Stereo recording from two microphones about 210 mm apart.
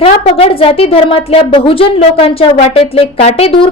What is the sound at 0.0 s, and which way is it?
Speech, 30° left (ahead or behind).